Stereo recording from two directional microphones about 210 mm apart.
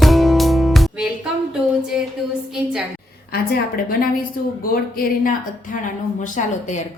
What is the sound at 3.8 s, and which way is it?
A woman's voice, 45° left (ahead or behind).